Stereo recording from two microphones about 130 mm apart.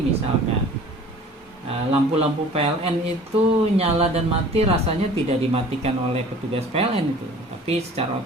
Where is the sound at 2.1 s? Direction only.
50° right (ahead or behind).